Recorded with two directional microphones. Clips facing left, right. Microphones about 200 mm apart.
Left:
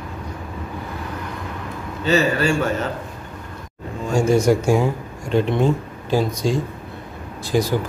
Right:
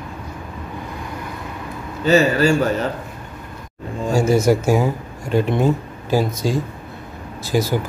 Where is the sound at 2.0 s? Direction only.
40° right (ahead or behind).